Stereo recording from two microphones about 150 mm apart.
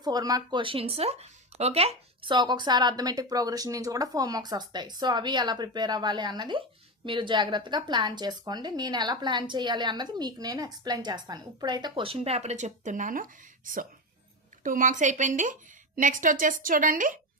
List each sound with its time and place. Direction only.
0.0 s speech: 25° right (ahead or behind); by 13.2 s 60° right (ahead or behind)
14.6 s a woman's voice: 60° right (ahead or behind)